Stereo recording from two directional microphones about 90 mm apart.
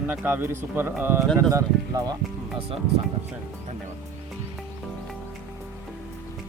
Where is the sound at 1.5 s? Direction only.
40° right (ahead or behind).